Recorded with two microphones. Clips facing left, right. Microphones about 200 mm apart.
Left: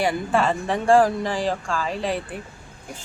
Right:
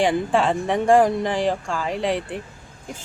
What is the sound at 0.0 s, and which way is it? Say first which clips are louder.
Speech: right 2 dB; 20° right (ahead or behind).